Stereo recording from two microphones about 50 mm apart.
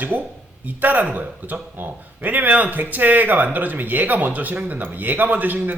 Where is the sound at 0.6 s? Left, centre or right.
Right.